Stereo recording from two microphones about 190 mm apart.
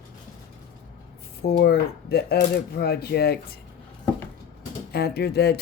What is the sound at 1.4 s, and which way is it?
Speech, 60° left (ahead or behind).